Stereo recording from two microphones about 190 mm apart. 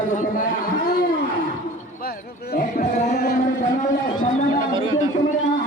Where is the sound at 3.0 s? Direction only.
55° left (ahead or behind).